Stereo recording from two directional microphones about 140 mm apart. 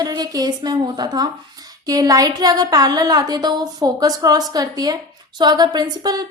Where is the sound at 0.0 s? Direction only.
30° right (ahead or behind).